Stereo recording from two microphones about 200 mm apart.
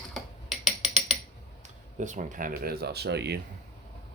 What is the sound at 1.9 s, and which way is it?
Speech, 40° right (ahead or behind).